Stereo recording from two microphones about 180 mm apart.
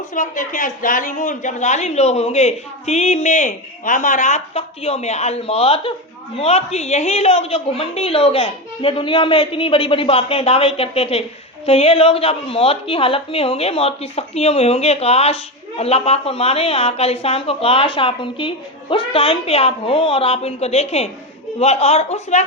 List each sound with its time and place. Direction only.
0.1 s speech: 45° left (ahead or behind)